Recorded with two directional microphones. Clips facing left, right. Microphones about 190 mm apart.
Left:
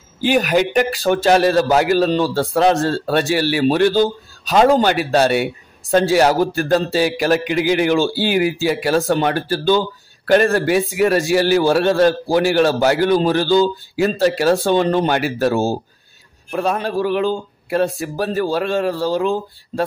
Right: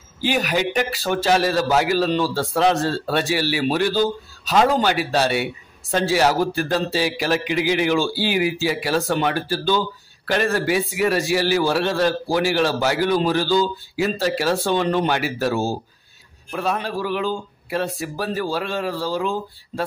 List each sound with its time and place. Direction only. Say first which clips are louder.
0.2 s a man's voice: left 6 dB; 50° left (ahead or behind)